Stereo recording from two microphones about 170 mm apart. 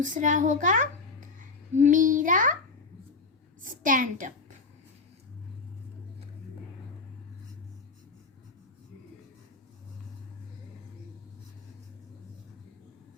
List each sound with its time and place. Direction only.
0.0 s a woman's voice: 50° right (ahead or behind)
3.6 s a child's voice: 50° right (ahead or behind)